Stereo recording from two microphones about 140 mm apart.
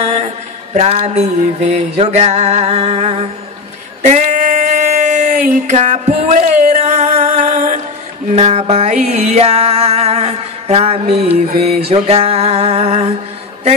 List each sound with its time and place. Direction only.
0.0 s mantra: 55° right (ahead or behind)
0.7 s music: 50° right (ahead or behind)
4.0 s a sound: 55° right (ahead or behind)
6.2 s music: 65° right (ahead or behind)
8.3 s music: 50° right (ahead or behind)